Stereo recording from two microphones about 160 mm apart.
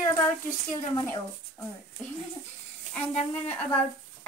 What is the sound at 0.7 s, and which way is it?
Speech, 20° left (ahead or behind).